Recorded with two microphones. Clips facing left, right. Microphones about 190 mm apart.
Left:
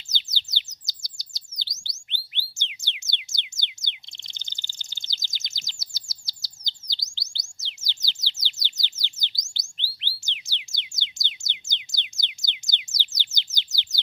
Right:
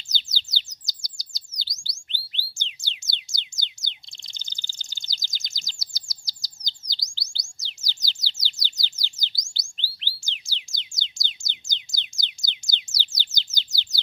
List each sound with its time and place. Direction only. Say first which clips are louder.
0.5 s chirp: right 1 dB; 20° left (ahead or behind)
8.4 s bird: right 1 dB; 20° left (ahead or behind)
10.2 s music: left 1 dB; 20° left (ahead or behind)